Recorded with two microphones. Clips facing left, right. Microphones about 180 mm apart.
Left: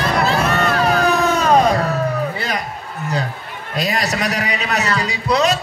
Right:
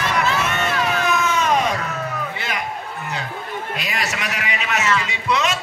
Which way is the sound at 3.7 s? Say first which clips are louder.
Left 10 dB; 35° left (ahead or behind).